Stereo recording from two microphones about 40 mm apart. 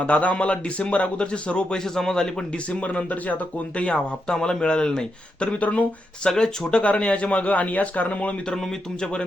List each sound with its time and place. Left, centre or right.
0.0 s speech: left
1.7 s speech: centre
2.6 s speech: left
3.8 s speech: left
6.2 s speech: centre; by 8.4 s left
8.5 s speech: centre